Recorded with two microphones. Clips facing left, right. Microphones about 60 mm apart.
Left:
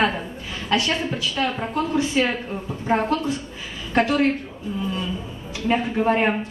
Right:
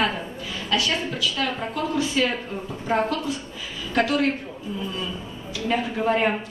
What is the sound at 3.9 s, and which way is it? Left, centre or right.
Speech, left.